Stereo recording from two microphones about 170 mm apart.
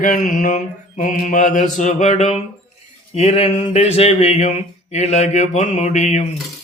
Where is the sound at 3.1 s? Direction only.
40° left (ahead or behind).